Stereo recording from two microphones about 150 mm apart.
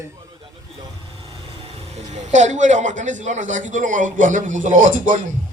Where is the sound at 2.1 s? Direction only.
50° right (ahead or behind).